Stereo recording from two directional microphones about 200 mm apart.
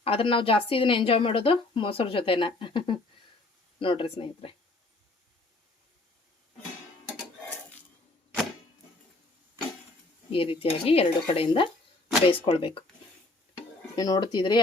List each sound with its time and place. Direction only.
0.0 s a woman's voice: 25° left (ahead or behind)
10.3 s a woman's voice: 25° left (ahead or behind)
13.9 s a woman's voice: 20° left (ahead or behind)